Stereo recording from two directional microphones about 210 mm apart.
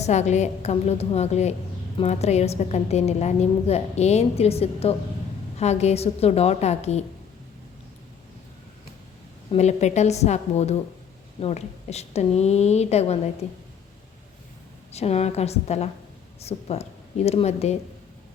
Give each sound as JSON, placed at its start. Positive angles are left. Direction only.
{"t": 0.0, "sound": "a woman's voice", "side_deg": 35}
{"t": 9.5, "sound": "a woman's voice", "side_deg": 30}
{"t": 14.9, "sound": "a woman's voice", "side_deg": 30}